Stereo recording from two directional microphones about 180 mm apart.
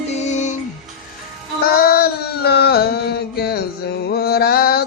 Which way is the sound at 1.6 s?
55° left (ahead or behind).